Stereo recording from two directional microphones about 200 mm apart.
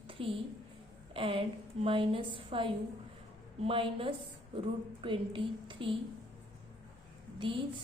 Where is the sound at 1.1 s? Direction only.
30° right (ahead or behind).